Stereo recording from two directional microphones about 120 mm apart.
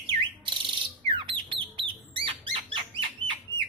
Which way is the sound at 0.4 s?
45° right (ahead or behind).